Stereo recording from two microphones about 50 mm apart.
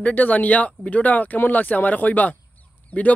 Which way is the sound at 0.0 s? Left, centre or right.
Left.